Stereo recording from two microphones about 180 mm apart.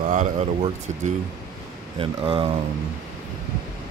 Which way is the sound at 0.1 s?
45° right (ahead or behind).